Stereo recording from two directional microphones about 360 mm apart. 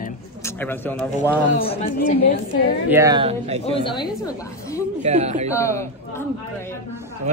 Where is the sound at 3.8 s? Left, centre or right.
Centre.